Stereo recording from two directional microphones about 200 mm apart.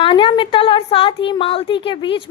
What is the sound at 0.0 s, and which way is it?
A woman's voice, 25° left (ahead or behind).